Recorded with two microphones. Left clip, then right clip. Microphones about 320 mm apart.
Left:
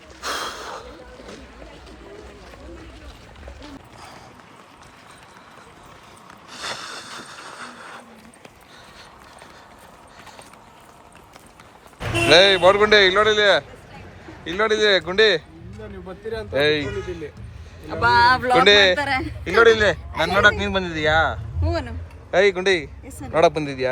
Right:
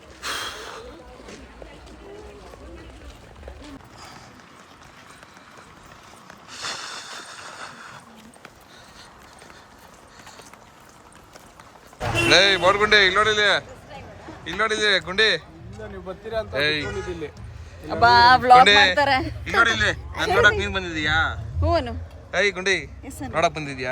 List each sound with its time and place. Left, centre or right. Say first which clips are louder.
0.2 s snort: left 2 dB; centre
6.5 s a sound: left 1 dB; centre
12.3 s speech: left 4 dB; centre
16.5 s speech: left 5 dB; centre
17.8 s speech: right 2 dB; right
18.6 s speech: left 1 dB; centre
18.9 s speech: right 3 dB; right
19.5 s a man's voice: left 5 dB; centre
21.6 s speech: right 5 dB; right
22.3 s speech: left 4 dB; centre